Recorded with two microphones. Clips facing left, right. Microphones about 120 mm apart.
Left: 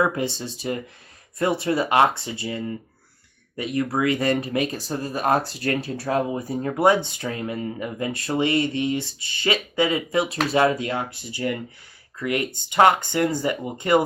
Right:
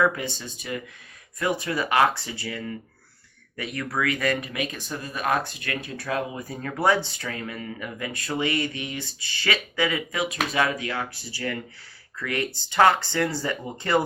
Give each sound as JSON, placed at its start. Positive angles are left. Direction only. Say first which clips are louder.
{"t": 0.0, "sound": "speech", "louder": "left 1 dB", "side_deg": 25}